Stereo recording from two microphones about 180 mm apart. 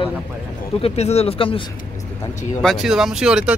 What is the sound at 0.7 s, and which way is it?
Speech, 35° left (ahead or behind).